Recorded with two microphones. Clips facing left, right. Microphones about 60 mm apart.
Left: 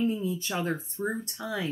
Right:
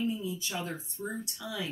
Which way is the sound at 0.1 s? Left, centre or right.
Left.